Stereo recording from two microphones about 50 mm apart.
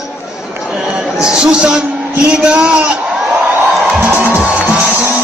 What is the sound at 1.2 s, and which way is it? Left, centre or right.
A man's voice, centre.